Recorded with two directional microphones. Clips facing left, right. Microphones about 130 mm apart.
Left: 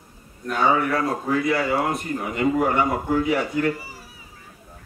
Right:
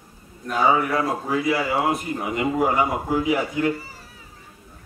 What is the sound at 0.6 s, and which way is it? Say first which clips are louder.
A man's voice: right 1 dB; 5° right (ahead or behind).